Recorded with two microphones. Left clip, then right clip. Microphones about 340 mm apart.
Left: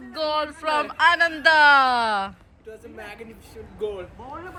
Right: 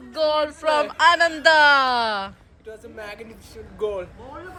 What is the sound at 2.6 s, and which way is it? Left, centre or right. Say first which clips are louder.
Speech: right 3 dB; centre.